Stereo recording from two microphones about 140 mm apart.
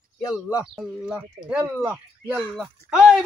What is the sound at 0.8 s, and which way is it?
Speech, 5° right (ahead or behind).